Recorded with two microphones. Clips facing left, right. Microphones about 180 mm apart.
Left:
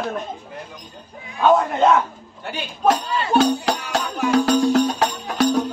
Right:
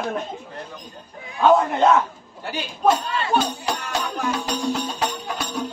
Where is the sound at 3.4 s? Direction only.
75° left (ahead or behind).